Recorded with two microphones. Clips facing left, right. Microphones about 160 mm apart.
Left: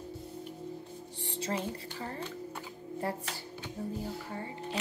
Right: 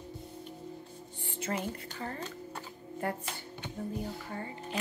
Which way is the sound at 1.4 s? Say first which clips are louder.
Even; 30° left (ahead or behind).